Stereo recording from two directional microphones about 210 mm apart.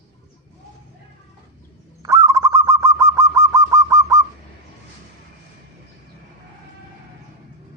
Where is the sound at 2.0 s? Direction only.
15° right (ahead or behind).